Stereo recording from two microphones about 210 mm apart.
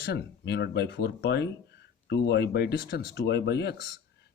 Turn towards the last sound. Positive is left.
turn(degrees=55)  # may be behind; listen again after turning